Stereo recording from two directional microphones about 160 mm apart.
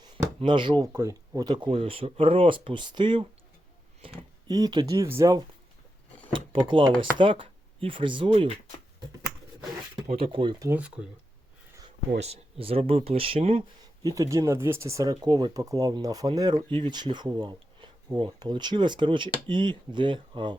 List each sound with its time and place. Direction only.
0.3 s speech: 30° right (ahead or behind)
0.9 s speech: 15° right (ahead or behind)
4.0 s a sound: 35° right (ahead or behind)
4.4 s speech: 25° right (ahead or behind)
6.3 s a sound: 30° right (ahead or behind)
7.0 s speech: 30° right (ahead or behind)
10.1 s speech: 35° right (ahead or behind)
10.7 s speech: 10° right (ahead or behind)
12.2 s speech: 40° right (ahead or behind)
14.2 s speech: 20° right (ahead or behind)